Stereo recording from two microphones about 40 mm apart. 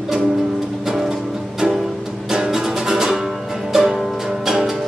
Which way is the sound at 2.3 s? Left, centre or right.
Centre.